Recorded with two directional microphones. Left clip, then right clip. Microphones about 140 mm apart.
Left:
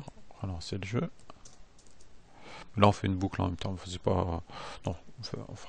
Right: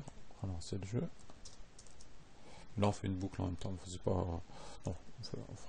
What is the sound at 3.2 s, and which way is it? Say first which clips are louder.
Speech: left 11 dB; 20° left (ahead or behind).